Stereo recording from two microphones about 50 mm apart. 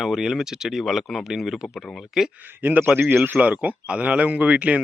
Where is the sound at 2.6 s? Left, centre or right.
Right.